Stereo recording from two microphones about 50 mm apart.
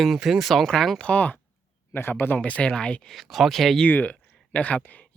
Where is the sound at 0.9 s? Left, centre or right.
Left.